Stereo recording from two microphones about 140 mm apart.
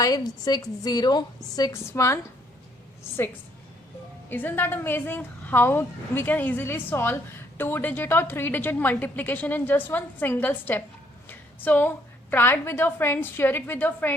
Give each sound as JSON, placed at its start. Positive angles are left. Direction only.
{"t": 0.0, "sound": "a woman's voice", "side_deg": 25}
{"t": 4.3, "sound": "a woman's voice", "side_deg": 15}